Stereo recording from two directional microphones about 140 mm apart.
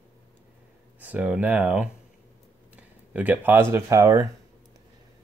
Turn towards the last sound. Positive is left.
turn(degrees=-20)  # may be behind; listen again after turning